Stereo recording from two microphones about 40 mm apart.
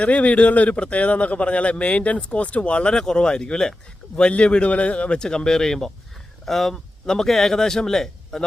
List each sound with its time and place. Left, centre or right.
0.0 s a man's voice: left; by 8.4 s centre